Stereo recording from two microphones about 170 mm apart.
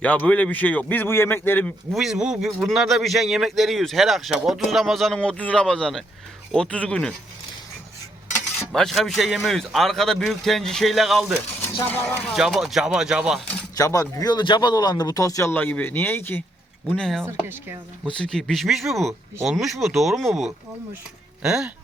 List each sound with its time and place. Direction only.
0.0 s a man's voice: 10° left (ahead or behind)
2.0 s a man's voice: 5° right (ahead or behind)
8.7 s a man's voice: centre (ahead or behind)
11.8 s a man's voice: 10° left (ahead or behind)
12.3 s a man's voice: centre (ahead or behind)
13.7 s speech: 20° left (ahead or behind)
16.9 s a man's voice: centre (ahead or behind)
17.2 s a woman's voice: 15° right (ahead or behind)
18.2 s a man's voice: 5° left (ahead or behind)
21.4 s a man's voice: 5° right (ahead or behind)